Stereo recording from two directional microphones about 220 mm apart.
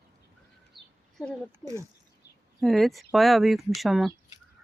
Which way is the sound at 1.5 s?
10° right (ahead or behind).